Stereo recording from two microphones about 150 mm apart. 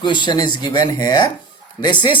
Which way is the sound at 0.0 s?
30° left (ahead or behind).